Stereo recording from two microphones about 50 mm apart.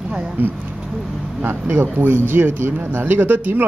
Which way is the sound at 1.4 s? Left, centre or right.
Right.